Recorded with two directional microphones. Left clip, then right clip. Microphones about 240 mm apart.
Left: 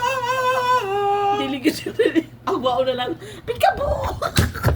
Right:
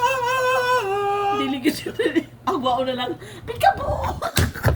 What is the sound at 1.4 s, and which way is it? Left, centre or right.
Chuckle, centre.